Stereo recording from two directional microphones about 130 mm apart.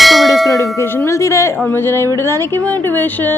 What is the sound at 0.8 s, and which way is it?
Music, 20° left (ahead or behind).